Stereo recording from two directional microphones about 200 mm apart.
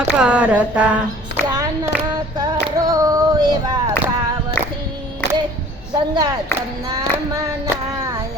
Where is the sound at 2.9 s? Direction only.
15° right (ahead or behind).